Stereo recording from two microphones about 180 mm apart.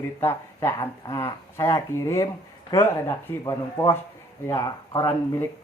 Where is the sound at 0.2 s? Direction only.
15° left (ahead or behind).